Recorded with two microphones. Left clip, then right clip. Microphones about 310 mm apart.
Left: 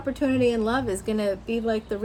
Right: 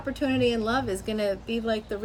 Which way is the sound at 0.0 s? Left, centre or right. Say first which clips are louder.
Left 2 dB; centre.